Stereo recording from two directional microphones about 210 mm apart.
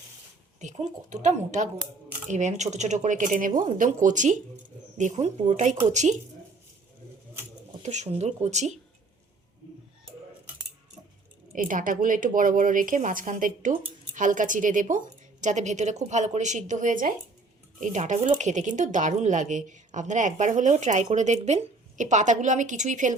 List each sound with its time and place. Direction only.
0.6 s a woman's voice: 35° right (ahead or behind)
7.8 s a woman's voice: 35° right (ahead or behind)
11.5 s a woman's voice: 40° right (ahead or behind)